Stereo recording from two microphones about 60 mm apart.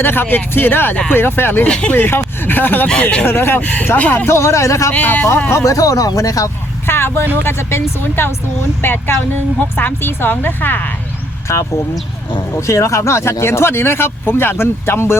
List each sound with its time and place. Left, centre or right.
0.0 s speech: left
1.6 s speech: centre
1.9 s speech: left
3.0 s speech: centre
3.2 s speech: left
3.6 s speech: left
4.3 s speech: left
4.9 s speech: left
5.6 s speech: left
6.8 s speech: left
11.5 s speech: left